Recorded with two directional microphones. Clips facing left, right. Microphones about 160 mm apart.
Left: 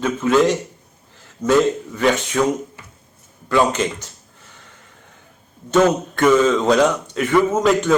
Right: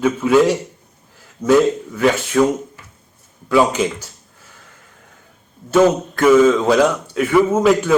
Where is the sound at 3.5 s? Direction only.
5° right (ahead or behind).